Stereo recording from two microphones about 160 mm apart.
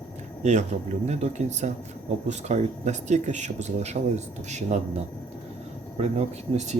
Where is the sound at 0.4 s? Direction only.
45° right (ahead or behind).